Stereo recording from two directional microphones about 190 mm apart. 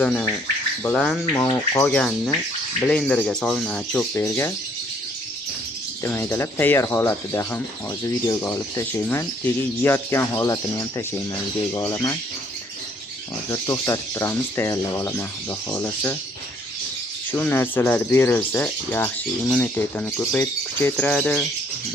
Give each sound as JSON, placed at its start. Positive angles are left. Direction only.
{"t": 0.0, "sound": "speech", "side_deg": 5}
{"t": 6.0, "sound": "speech", "side_deg": 15}
{"t": 13.5, "sound": "speech", "side_deg": 15}
{"t": 17.3, "sound": "speech", "side_deg": 10}